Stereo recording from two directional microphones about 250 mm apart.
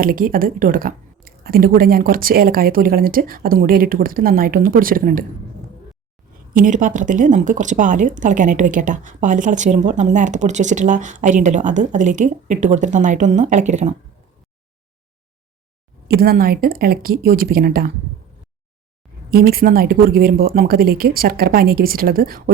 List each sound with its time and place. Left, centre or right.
0.0 s a woman's voice: right
6.5 s speech: right
16.0 s a woman's voice: right
19.3 s a woman's voice: right